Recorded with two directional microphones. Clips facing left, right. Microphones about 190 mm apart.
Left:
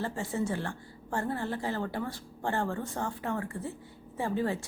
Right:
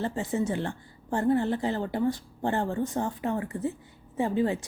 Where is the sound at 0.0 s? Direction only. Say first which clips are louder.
Right 4 dB; 20° right (ahead or behind).